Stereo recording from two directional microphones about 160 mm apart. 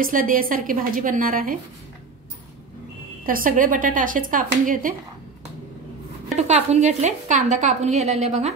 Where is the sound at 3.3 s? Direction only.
60° right (ahead or behind).